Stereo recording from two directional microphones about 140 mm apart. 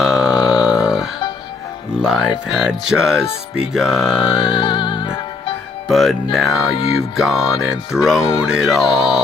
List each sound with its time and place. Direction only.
0.0 s burping: 5° right (ahead or behind)
2.0 s music: 5° right (ahead or behind)
4.6 s music: 35° left (ahead or behind)
5.9 s music: centre (ahead or behind)
6.7 s music: 40° left (ahead or behind)
7.2 s music: 5° right (ahead or behind)